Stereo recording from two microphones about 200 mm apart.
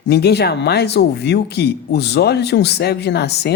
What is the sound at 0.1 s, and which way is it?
Speech, 55° left (ahead or behind).